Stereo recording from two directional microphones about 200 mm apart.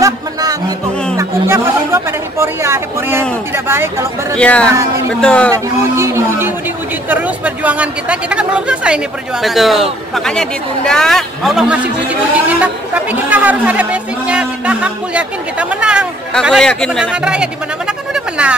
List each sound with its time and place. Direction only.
0.0 s music: 20° right (ahead or behind)
1.1 s speech: 15° right (ahead or behind)
4.4 s a man's voice: 5° left (ahead or behind)
5.5 s a man's voice: 15° right (ahead or behind)